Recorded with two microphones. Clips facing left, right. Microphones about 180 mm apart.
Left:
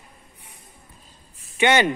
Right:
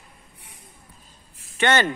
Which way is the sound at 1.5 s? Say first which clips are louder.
Left 2 dB; 15° left (ahead or behind).